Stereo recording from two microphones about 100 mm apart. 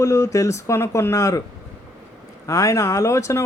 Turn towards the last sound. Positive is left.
turn(degrees=30)  # may be behind; listen again after turning